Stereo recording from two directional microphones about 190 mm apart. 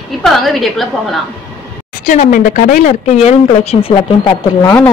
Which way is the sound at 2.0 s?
45° left (ahead or behind).